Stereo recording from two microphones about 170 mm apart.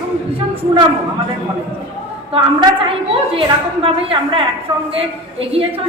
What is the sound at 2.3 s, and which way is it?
A woman's voice, 30° right (ahead or behind).